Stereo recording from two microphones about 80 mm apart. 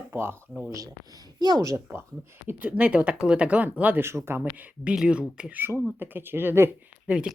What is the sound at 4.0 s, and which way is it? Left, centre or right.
Speech, right.